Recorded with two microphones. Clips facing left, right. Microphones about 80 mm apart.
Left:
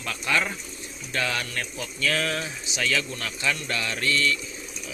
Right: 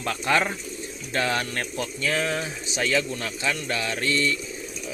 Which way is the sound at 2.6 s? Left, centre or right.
Right.